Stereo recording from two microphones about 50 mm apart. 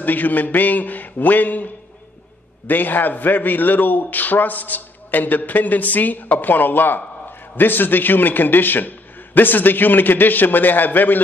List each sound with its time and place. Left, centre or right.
0.0 s a man's voice: left